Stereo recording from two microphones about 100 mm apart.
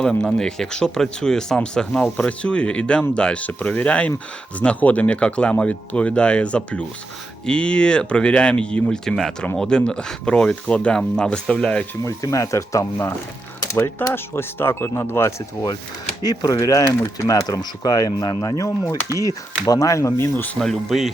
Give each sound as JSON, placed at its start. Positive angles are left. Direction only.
{"t": 0.0, "sound": "speech", "side_deg": 10}
{"t": 12.0, "sound": "speech", "side_deg": 35}
{"t": 16.2, "sound": "speech", "side_deg": 40}
{"t": 20.3, "sound": "speech", "side_deg": 15}
{"t": 20.6, "sound": "speech", "side_deg": 0}